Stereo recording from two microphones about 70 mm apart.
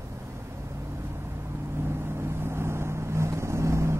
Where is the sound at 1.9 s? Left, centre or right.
Right.